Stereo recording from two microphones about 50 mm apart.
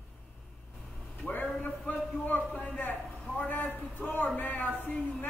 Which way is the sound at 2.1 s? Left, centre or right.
Left.